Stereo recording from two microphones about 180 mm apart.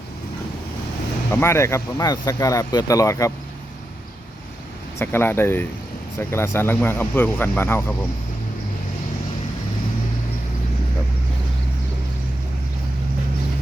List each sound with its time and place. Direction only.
1.3 s speech: 15° left (ahead or behind)
4.9 s speech: 15° left (ahead or behind)